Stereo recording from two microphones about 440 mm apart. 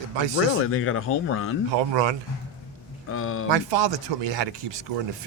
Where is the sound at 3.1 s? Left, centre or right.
Left.